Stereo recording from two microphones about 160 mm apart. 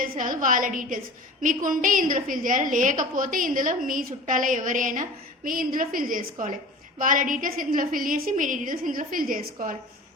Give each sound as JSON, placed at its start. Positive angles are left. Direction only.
{"t": 0.2, "sound": "a woman's voice", "side_deg": -55}